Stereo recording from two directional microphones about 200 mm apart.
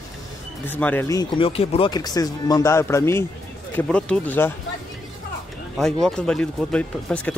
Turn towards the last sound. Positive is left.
turn(degrees=5)  # may be behind; listen again after turning